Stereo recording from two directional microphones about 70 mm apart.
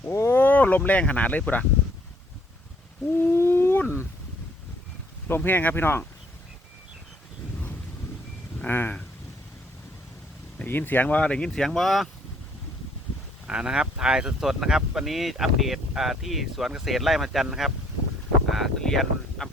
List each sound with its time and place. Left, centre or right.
0.1 s a sound: left
0.9 s speech: left
3.2 s a sound: left
5.3 s speech: left
8.6 s speech: left
10.6 s speech: left; by 12.0 s centre
13.5 s speech: centre